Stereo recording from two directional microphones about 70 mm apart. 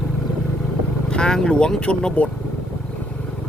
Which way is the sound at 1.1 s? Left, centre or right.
Centre.